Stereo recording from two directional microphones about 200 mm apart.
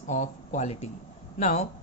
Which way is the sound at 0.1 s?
35° left (ahead or behind).